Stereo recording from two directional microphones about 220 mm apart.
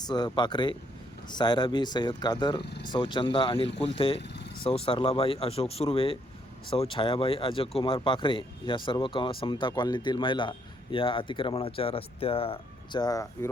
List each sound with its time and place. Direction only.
0.1 s speech: 20° left (ahead or behind)
4.2 s vehicle: 50° left (ahead or behind)
4.6 s speech: 25° left (ahead or behind)